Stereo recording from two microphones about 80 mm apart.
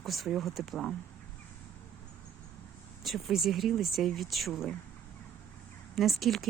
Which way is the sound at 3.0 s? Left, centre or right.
Centre.